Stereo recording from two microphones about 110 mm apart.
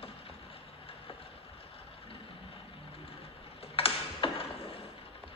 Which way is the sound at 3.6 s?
60° left (ahead or behind).